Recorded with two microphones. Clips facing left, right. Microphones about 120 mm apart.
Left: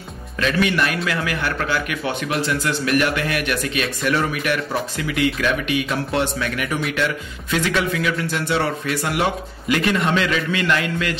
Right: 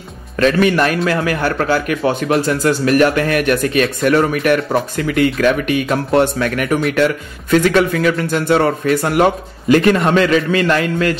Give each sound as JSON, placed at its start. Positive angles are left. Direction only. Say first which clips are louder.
{"t": 0.4, "sound": "a man's voice", "louder": "right 7 dB", "side_deg": -45}